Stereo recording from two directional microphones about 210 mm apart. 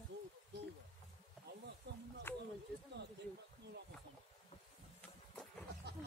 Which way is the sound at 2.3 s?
10° left (ahead or behind).